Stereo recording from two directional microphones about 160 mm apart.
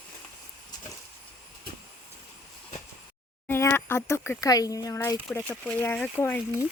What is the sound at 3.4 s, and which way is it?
Speech, 10° left (ahead or behind).